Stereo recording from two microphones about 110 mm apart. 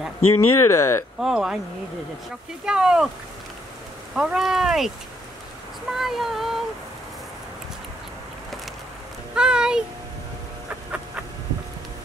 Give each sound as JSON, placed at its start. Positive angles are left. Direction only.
{"t": 0.3, "sound": "speech", "side_deg": 25}
{"t": 1.2, "sound": "speech", "side_deg": -5}
{"t": 2.6, "sound": "a child's voice", "side_deg": -5}
{"t": 4.1, "sound": "speech", "side_deg": -5}
{"t": 9.3, "sound": "a child's voice", "side_deg": -5}